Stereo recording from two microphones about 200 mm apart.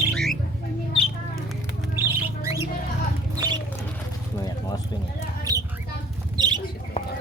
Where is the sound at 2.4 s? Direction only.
15° right (ahead or behind).